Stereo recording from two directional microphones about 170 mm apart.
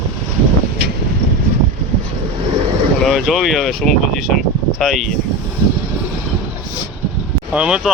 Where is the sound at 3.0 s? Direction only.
Centre (ahead or behind).